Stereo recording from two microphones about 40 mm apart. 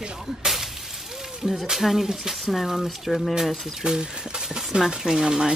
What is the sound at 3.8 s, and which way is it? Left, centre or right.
Speech, centre.